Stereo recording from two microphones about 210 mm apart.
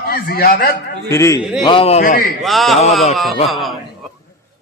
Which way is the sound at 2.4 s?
Centre (ahead or behind).